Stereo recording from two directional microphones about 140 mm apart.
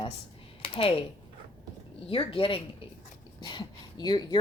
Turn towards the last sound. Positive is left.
turn(degrees=30)  # may be behind; listen again after turning